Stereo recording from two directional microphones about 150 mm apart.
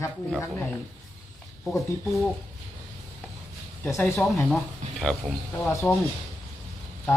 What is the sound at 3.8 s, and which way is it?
Speech, 20° left (ahead or behind).